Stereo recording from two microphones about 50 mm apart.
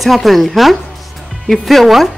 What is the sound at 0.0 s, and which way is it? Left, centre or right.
A man's voice, centre.